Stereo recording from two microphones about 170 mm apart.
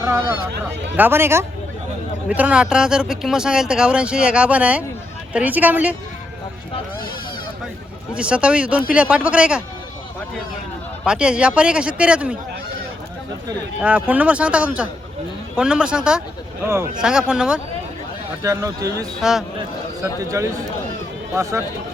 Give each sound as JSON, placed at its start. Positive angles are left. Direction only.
{"t": 0.0, "sound": "speech", "side_deg": -15}
{"t": 8.1, "sound": "speech", "side_deg": -5}
{"t": 11.0, "sound": "speech", "side_deg": -5}
{"t": 13.8, "sound": "speech", "side_deg": -10}
{"t": 18.4, "sound": "a man's voice", "side_deg": -20}
{"t": 19.2, "sound": "speech", "side_deg": 0}
{"t": 19.5, "sound": "a man's voice", "side_deg": -20}